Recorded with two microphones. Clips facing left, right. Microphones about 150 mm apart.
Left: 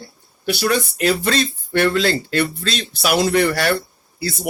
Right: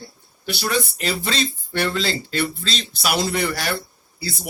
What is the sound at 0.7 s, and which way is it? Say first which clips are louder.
Speech: left 4 dB; 50° left (ahead or behind).